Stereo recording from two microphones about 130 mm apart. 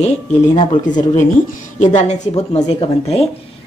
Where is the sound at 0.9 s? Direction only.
75° left (ahead or behind); by 3.3 s 50° left (ahead or behind).